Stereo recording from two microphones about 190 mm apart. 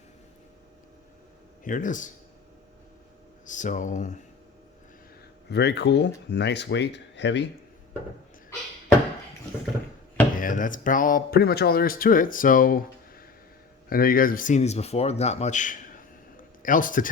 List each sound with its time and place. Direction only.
1.6 s speech: 45° left (ahead or behind)
3.4 s speech: 40° left (ahead or behind)
5.5 s speech: 60° left (ahead or behind)
10.3 s speech: 45° left (ahead or behind)